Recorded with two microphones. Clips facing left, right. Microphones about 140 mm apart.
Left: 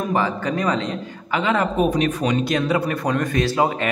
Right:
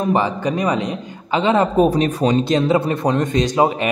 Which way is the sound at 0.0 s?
20° right (ahead or behind).